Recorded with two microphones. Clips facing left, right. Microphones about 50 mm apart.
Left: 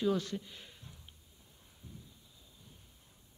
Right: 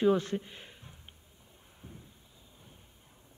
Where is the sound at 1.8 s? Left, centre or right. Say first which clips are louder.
Right 3 dB; right.